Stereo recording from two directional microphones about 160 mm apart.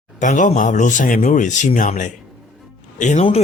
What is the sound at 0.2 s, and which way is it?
Speech, 50° left (ahead or behind).